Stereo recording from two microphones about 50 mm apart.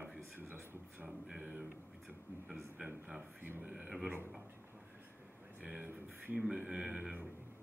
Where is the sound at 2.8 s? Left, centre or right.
Centre.